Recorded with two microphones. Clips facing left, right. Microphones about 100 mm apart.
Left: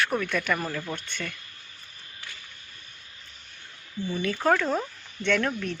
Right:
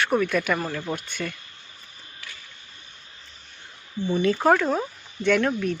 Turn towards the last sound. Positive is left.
turn(degrees=-5)  # may be behind; listen again after turning